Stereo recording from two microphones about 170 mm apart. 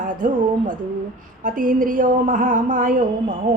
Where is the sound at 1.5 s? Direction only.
55° right (ahead or behind).